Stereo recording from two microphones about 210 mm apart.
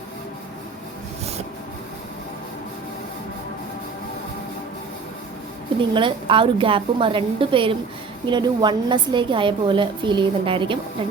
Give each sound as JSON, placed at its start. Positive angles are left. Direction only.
{"t": 5.9, "sound": "a woman's voice", "side_deg": -25}